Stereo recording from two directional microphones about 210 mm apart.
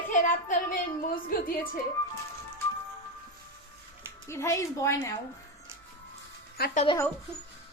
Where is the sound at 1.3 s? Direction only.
40° left (ahead or behind).